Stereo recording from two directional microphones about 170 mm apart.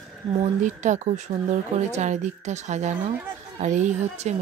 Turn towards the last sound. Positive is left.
turn(degrees=-45)  # may be behind; listen again after turning